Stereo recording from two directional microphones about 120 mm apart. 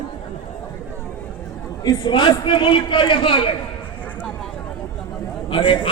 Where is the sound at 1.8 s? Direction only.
40° left (ahead or behind).